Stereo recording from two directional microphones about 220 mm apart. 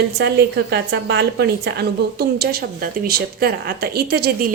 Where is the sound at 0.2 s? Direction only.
50° right (ahead or behind).